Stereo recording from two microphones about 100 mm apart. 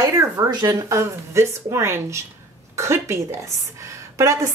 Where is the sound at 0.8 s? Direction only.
30° right (ahead or behind).